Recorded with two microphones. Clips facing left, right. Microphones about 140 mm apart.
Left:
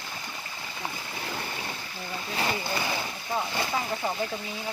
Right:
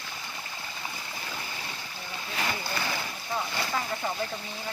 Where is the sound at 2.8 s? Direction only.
15° left (ahead or behind).